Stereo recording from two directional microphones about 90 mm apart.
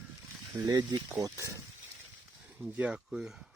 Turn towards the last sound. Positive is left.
turn(degrees=-5)  # may be behind; listen again after turning